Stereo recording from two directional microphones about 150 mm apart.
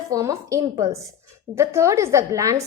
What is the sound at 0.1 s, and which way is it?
A woman's voice, 20° right (ahead or behind).